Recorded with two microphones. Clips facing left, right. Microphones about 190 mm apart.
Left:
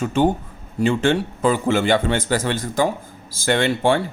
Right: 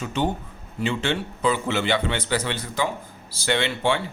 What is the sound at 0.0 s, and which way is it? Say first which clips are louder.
A man's voice: left 7 dB; 50° left (ahead or behind).